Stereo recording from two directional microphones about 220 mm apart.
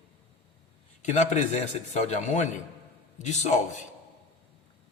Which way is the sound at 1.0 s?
35° left (ahead or behind).